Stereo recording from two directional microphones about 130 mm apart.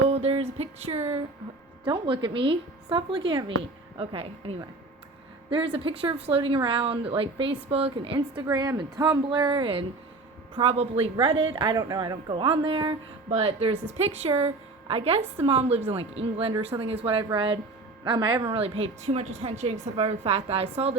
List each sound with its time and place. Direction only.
0.1 s a sound: 45° right (ahead or behind)
1.8 s a woman's voice: 40° right (ahead or behind)
8.4 s a woman's voice: 25° right (ahead or behind)
12.3 s a woman's voice: 40° right (ahead or behind)
18.4 s a woman's voice: 45° right (ahead or behind)